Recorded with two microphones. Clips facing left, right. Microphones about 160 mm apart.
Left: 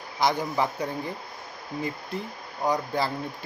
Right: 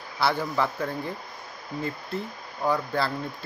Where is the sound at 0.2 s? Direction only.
15° left (ahead or behind).